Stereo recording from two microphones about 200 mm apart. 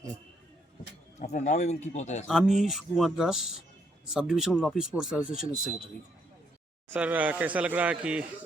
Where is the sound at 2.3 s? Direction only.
Centre (ahead or behind).